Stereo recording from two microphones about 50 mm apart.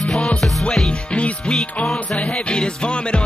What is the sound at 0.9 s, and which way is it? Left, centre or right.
Music, left.